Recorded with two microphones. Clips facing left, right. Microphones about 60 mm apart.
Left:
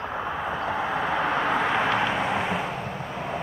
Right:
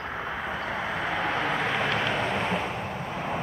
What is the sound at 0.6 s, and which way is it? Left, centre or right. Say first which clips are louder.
Vehicle: left 5 dB; centre.